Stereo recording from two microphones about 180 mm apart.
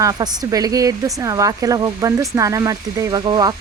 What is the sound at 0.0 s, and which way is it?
Speech, 20° right (ahead or behind).